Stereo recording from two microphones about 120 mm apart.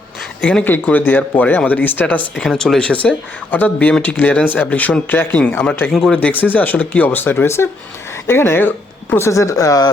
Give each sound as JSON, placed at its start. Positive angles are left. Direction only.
{"t": 0.4, "sound": "speech", "side_deg": 15}
{"t": 2.4, "sound": "speech", "side_deg": 0}
{"t": 5.9, "sound": "speech", "side_deg": 0}
{"t": 6.1, "sound": "speech", "side_deg": 15}